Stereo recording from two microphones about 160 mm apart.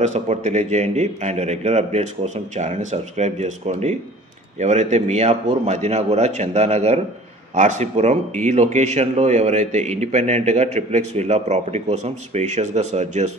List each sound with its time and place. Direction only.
0.0 s a man's voice: 45° right (ahead or behind)